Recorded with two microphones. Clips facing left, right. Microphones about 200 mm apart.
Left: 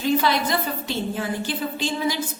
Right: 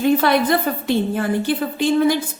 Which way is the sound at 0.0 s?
55° right (ahead or behind).